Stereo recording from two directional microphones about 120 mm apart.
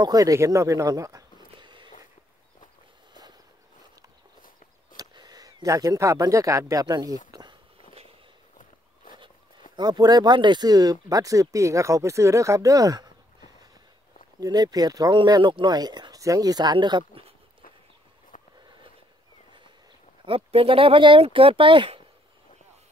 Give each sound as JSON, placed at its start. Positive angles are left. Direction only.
{"t": 0.0, "sound": "speech", "side_deg": -30}
{"t": 1.5, "sound": "a sound", "side_deg": -40}
{"t": 4.9, "sound": "speech", "side_deg": -35}
{"t": 7.2, "sound": "a sound", "side_deg": -35}
{"t": 9.8, "sound": "speech", "side_deg": -35}
{"t": 20.2, "sound": "speech", "side_deg": -50}